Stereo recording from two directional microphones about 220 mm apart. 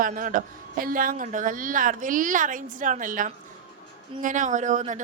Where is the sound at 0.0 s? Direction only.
35° right (ahead or behind).